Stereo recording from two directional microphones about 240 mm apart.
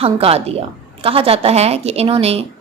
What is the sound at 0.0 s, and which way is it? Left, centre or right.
A woman's voice, right.